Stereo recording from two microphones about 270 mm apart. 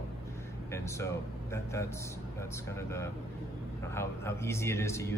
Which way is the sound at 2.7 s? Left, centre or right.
Centre.